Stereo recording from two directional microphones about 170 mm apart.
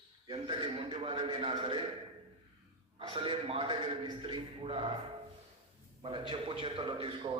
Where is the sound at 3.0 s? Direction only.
30° right (ahead or behind).